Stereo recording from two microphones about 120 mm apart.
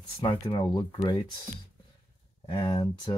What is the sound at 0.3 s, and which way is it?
Speech, 45° left (ahead or behind).